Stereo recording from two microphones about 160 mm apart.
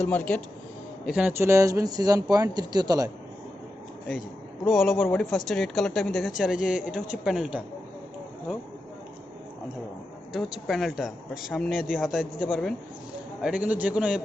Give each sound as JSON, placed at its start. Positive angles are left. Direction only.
{"t": 0.0, "sound": "speech", "side_deg": 10}
{"t": 1.0, "sound": "speech", "side_deg": -5}
{"t": 4.6, "sound": "speech", "side_deg": 0}
{"t": 4.9, "sound": "speech", "side_deg": 10}
{"t": 5.2, "sound": "speech", "side_deg": 0}
{"t": 10.3, "sound": "speech", "side_deg": 0}
{"t": 13.4, "sound": "a man's voice", "side_deg": -10}